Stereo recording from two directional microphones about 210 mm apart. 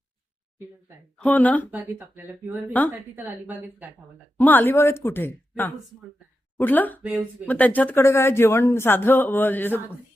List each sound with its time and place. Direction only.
1.2 s speech: 5° left (ahead or behind)
1.7 s speech: 10° right (ahead or behind)
4.4 s speech: 10° left (ahead or behind)
7.0 s speech: 5° right (ahead or behind)
7.4 s speech: 10° left (ahead or behind)